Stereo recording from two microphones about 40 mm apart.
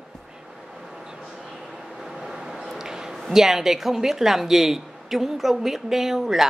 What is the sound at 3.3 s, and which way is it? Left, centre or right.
A woman's voice, centre.